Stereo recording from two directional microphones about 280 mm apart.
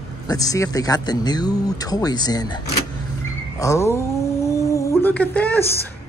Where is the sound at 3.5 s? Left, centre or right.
Centre.